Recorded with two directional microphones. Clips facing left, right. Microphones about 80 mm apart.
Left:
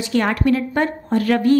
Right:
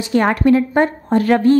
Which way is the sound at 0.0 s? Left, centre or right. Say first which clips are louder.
Right 4 dB; right.